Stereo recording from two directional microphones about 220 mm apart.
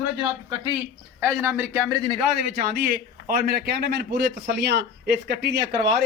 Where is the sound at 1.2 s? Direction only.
10° right (ahead or behind).